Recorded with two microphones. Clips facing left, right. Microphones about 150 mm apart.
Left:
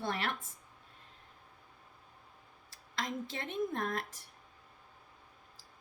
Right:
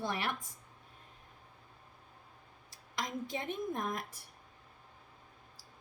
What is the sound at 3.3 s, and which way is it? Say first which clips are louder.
Speech: left 1 dB; 15° right (ahead or behind).